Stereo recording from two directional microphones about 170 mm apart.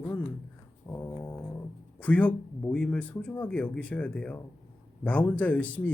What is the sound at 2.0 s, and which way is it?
Speech, 10° left (ahead or behind).